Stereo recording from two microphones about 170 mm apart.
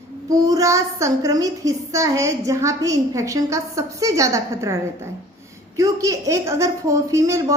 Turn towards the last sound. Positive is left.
turn(degrees=-20)  # may be behind; listen again after turning